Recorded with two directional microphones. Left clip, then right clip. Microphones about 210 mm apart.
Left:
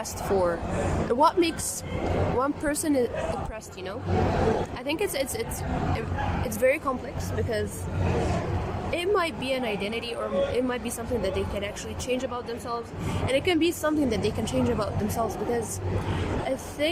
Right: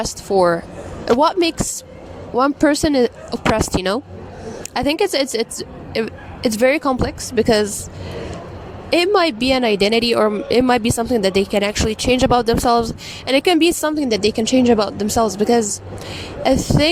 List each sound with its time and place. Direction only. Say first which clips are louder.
0.0 s speech: right 10 dB; 40° right (ahead or behind)
8.9 s speech: right 11 dB; 45° right (ahead or behind)